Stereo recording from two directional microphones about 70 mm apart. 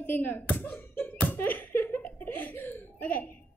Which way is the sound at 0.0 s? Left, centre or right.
Left.